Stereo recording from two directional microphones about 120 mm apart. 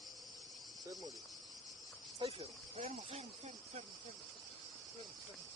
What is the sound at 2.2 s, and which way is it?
Cricket, 60° right (ahead or behind).